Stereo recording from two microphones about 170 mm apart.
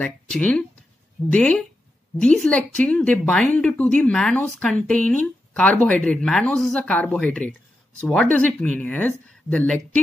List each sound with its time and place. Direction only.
0.0 s speech: 10° left (ahead or behind)